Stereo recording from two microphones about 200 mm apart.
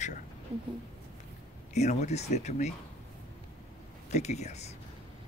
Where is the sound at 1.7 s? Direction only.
35° left (ahead or behind).